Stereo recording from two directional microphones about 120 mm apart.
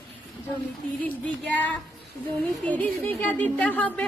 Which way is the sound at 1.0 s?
10° left (ahead or behind).